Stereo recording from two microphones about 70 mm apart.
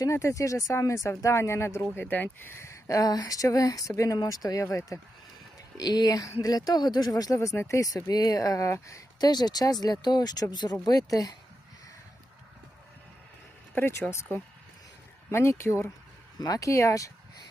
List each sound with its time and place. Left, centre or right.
0.0 s speech: left
4.2 s speech: left
5.7 s speech: left
7.3 s speech: left
8.1 s speech: left
9.2 s speech: left
13.7 s speech: left
15.3 s speech: left
16.4 s speech: left